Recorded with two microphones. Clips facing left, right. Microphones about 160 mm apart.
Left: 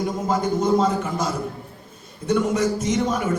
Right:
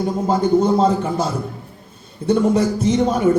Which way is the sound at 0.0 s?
30° right (ahead or behind).